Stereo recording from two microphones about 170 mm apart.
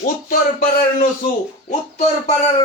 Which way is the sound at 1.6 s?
40° left (ahead or behind).